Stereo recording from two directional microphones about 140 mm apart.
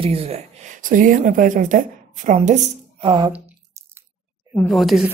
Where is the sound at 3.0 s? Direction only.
35° right (ahead or behind).